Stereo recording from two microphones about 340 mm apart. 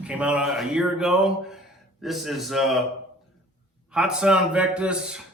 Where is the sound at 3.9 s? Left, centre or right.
Centre.